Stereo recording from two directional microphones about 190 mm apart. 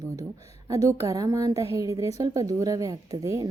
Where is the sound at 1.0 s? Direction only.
15° right (ahead or behind).